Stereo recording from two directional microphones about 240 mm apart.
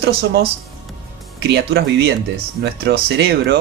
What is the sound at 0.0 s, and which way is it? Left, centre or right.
Speech, right.